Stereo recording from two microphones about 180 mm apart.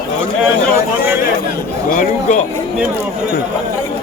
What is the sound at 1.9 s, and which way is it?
Speech, 45° left (ahead or behind).